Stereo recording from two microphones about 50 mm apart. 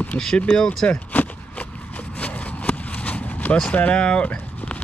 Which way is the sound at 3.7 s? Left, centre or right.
Left.